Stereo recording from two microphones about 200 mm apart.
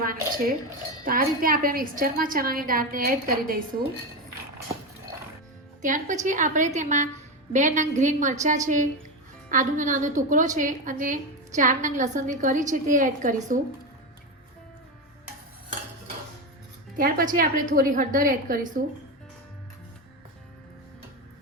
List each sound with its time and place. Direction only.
0.0 s a woman's voice: 45° right (ahead or behind)
5.8 s a woman's voice: 40° right (ahead or behind)
17.0 s a woman's voice: 45° right (ahead or behind)